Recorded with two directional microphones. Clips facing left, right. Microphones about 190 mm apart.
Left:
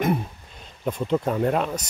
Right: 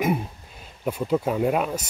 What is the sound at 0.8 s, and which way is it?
Speech, 5° right (ahead or behind).